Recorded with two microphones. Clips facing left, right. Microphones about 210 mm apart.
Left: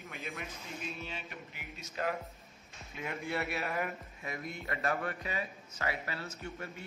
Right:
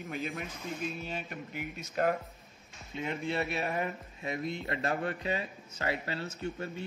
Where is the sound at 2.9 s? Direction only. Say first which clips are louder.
Right 4 dB; 25° right (ahead or behind).